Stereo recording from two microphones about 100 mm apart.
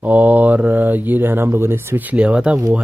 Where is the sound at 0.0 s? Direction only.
15° right (ahead or behind).